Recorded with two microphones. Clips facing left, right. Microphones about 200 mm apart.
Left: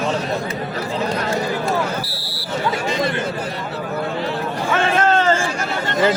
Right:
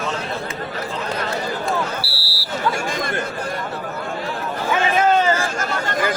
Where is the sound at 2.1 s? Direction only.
20° left (ahead or behind).